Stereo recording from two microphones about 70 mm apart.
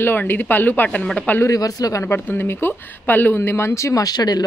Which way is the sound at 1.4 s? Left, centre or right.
Left.